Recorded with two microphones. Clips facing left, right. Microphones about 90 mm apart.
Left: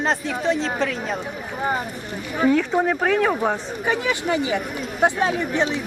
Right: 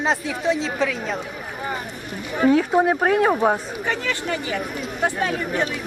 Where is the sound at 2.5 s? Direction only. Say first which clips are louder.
Right 2 dB; 10° right (ahead or behind).